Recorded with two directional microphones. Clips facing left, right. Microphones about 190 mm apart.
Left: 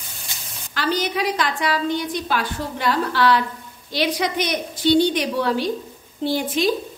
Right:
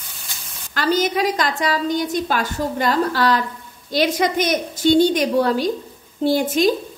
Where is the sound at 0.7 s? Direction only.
45° right (ahead or behind).